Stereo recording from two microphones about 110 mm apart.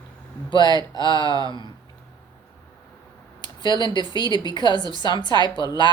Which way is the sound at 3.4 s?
45° left (ahead or behind).